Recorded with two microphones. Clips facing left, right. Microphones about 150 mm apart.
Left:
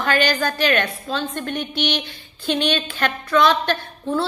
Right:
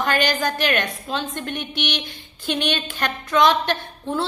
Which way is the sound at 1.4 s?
50° left (ahead or behind).